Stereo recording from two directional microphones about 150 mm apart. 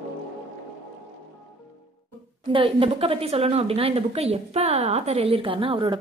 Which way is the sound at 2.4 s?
35° right (ahead or behind).